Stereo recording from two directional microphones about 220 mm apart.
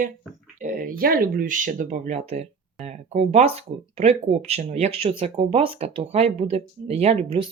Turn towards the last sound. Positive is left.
turn(degrees=-25)  # may be behind; listen again after turning